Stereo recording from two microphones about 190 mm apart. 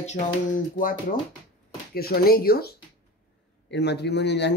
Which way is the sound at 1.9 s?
55° left (ahead or behind).